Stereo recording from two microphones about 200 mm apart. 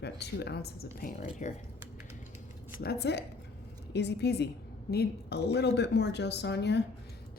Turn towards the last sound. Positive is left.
turn(degrees=55)  # may be behind; listen again after turning